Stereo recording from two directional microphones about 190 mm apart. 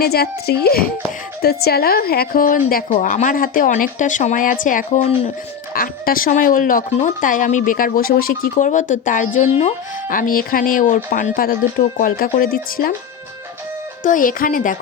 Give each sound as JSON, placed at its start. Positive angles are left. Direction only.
{"t": 0.0, "sound": "speech", "side_deg": 55}
{"t": 5.7, "sound": "speech", "side_deg": 50}
{"t": 14.0, "sound": "speech", "side_deg": 45}